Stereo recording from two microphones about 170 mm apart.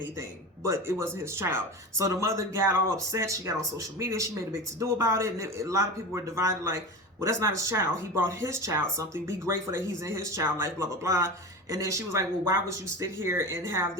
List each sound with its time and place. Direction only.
0.2 s speech: 15° right (ahead or behind)